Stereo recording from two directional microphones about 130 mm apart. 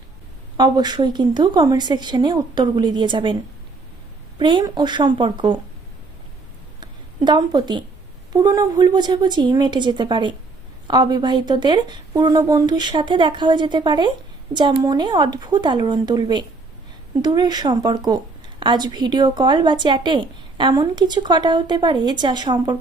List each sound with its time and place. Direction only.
0.5 s a woman's voice: 30° right (ahead or behind)
4.4 s a woman's voice: 35° right (ahead or behind)
6.7 s a sound: 35° right (ahead or behind)
8.3 s a woman's voice: 30° right (ahead or behind)